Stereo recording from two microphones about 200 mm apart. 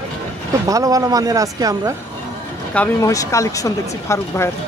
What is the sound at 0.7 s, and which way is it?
Speech, 15° right (ahead or behind).